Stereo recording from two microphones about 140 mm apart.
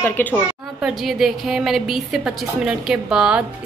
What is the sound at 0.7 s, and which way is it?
A woman's voice, 5° right (ahead or behind).